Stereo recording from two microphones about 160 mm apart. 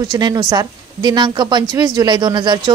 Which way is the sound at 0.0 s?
25° right (ahead or behind).